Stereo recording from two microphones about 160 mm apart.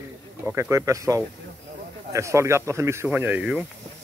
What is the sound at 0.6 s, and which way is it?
Speech, 20° right (ahead or behind).